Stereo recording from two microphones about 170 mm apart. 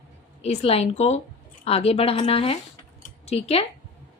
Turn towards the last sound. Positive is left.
turn(degrees=40)  # may be behind; listen again after turning